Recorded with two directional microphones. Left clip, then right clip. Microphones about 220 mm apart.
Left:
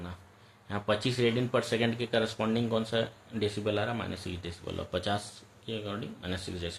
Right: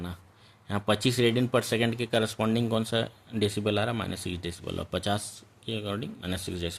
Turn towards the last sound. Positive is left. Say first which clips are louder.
# right 3 dB
turn(degrees=-45)  # may be behind; listen again after turning